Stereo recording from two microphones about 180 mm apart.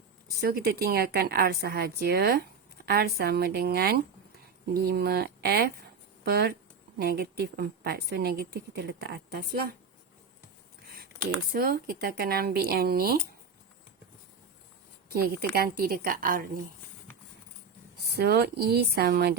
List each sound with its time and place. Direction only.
0.4 s a woman's voice: 60° right (ahead or behind)
10.8 s a sound: 60° right (ahead or behind)
11.5 s a woman's voice: 55° right (ahead or behind)
15.1 s a woman's voice: 60° right (ahead or behind)
18.2 s a woman's voice: 65° right (ahead or behind)